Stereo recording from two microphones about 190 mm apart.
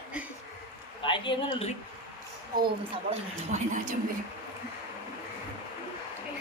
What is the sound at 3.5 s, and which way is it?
Speech, 40° right (ahead or behind).